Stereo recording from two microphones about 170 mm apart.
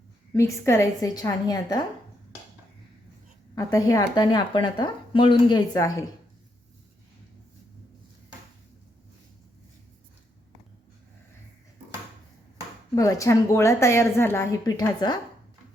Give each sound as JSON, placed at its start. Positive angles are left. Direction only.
{"t": 0.3, "sound": "speech", "side_deg": 15}
{"t": 3.5, "sound": "speech", "side_deg": 20}
{"t": 13.0, "sound": "a woman's voice", "side_deg": 20}